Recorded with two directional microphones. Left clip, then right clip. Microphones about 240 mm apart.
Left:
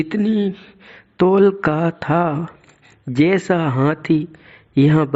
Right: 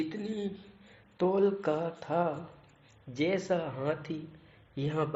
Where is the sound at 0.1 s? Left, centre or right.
Left.